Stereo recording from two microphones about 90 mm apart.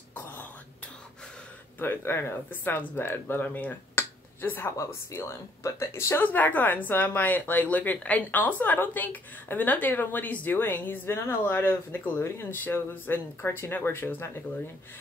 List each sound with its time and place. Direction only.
1.8 s speech: 25° left (ahead or behind)
6.2 s speech: 20° left (ahead or behind)